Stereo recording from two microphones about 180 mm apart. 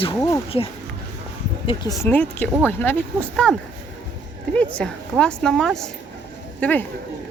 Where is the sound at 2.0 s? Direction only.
10° left (ahead or behind).